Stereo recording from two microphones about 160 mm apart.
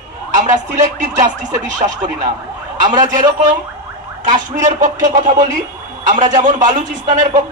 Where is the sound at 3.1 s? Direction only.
50° right (ahead or behind).